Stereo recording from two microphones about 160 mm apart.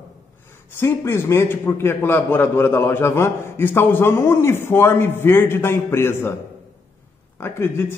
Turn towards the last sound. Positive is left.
turn(degrees=15)  # may be behind; listen again after turning